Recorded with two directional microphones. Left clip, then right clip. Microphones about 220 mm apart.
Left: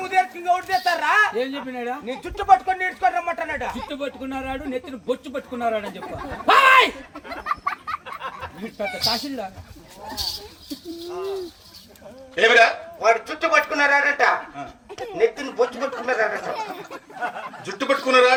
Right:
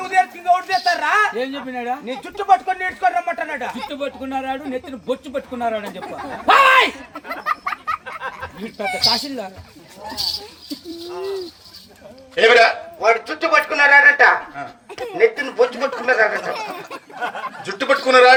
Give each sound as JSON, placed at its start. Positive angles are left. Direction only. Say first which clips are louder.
{"t": 0.0, "sound": "a man's voice", "louder": "right 3 dB", "side_deg": 0}
{"t": 1.6, "sound": "speech", "louder": "right 4 dB", "side_deg": -15}
{"t": 2.0, "sound": "speech", "louder": "even", "side_deg": 5}
{"t": 3.8, "sound": "speech", "louder": "right 3 dB", "side_deg": -15}
{"t": 7.4, "sound": "a sound", "louder": "right 4 dB", "side_deg": -40}
{"t": 8.5, "sound": "speech", "louder": "right 5 dB", "side_deg": -40}
{"t": 11.1, "sound": "speech", "louder": "right 2 dB", "side_deg": -35}
{"t": 12.4, "sound": "speech", "louder": "right 3 dB", "side_deg": -15}
{"t": 16.5, "sound": "speech", "louder": "right 3 dB", "side_deg": -35}
{"t": 17.9, "sound": "speech", "louder": "right 5 dB", "side_deg": -15}